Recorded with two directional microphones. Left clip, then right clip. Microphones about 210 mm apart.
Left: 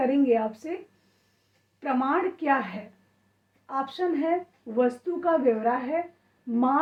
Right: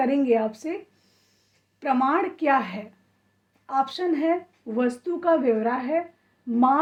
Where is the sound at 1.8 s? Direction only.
50° right (ahead or behind).